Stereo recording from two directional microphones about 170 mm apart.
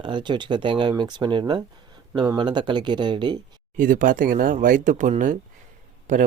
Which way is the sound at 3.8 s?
50° right (ahead or behind).